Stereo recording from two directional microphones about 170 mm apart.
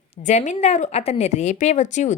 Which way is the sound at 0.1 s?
45° left (ahead or behind).